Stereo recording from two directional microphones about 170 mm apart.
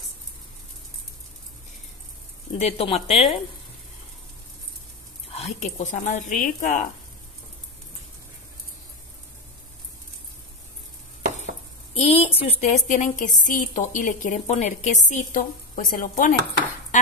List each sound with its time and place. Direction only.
2.6 s speech: 35° left (ahead or behind)
5.3 s a woman's voice: 40° left (ahead or behind)
11.9 s a woman's voice: 40° left (ahead or behind); by 16.3 s 55° left (ahead or behind)
16.9 s a sound: 45° left (ahead or behind)